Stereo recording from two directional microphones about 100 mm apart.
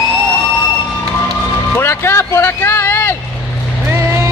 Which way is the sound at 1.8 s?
25° left (ahead or behind).